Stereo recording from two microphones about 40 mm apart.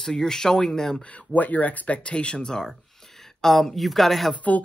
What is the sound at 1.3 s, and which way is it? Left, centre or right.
Speech, left.